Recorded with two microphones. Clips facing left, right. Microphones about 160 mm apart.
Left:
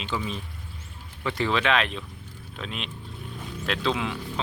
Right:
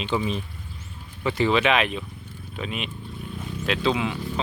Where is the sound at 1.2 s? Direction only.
5° right (ahead or behind).